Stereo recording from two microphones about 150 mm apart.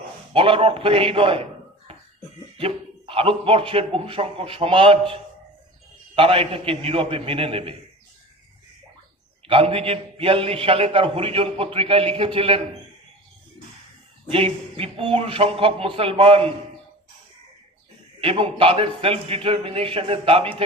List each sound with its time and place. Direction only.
0.3 s a man's voice: 35° right (ahead or behind)
2.6 s a man's voice: 40° right (ahead or behind)
9.5 s a man's voice: 35° right (ahead or behind)
14.3 s a man's voice: 40° right (ahead or behind)
18.2 s a man's voice: 35° right (ahead or behind)